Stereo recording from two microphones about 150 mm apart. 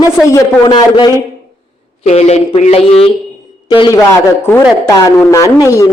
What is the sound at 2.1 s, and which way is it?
A man's voice, 45° left (ahead or behind).